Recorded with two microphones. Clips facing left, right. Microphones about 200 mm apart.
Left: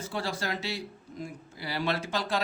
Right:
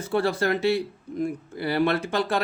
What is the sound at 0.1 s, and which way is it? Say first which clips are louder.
Speech: right 11 dB; 60° right (ahead or behind).